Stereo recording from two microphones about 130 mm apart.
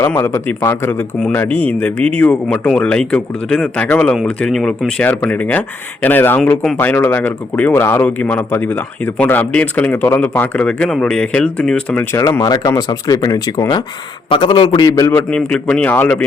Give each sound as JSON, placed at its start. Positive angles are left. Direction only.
{"t": 0.0, "sound": "speech", "side_deg": 20}
{"t": 6.7, "sound": "speech", "side_deg": 15}
{"t": 12.1, "sound": "a man's voice", "side_deg": 25}
{"t": 15.3, "sound": "speech", "side_deg": 5}